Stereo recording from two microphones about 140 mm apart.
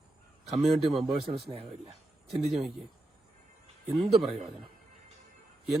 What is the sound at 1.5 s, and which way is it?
Speech, 45° right (ahead or behind).